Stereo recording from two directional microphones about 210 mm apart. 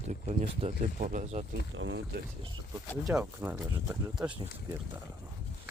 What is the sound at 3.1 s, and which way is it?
Speech, 10° right (ahead or behind).